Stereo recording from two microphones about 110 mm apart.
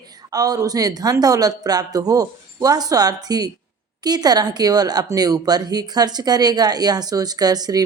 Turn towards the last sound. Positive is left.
turn(degrees=-35)  # may be behind; listen again after turning